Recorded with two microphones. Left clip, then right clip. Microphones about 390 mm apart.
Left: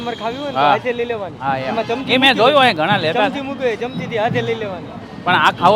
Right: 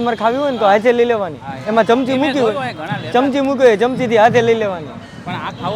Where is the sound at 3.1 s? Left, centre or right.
Right.